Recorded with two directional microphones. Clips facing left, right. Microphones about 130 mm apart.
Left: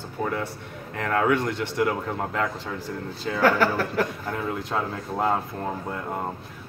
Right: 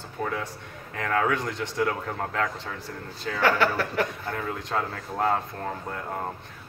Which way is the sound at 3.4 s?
40° left (ahead or behind).